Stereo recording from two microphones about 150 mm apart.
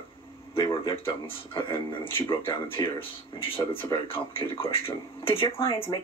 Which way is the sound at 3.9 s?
35° left (ahead or behind).